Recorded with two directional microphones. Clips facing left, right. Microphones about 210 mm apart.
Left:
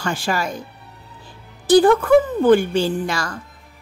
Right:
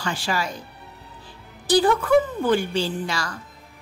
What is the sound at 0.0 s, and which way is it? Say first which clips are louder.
Speech: left 4 dB; 50° left (ahead or behind).